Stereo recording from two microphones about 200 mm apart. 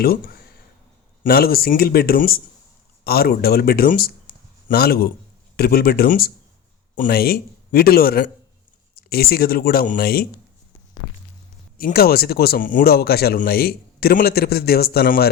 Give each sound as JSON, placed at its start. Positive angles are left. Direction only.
{"t": 0.0, "sound": "speech", "side_deg": 50}
{"t": 11.8, "sound": "speech", "side_deg": 50}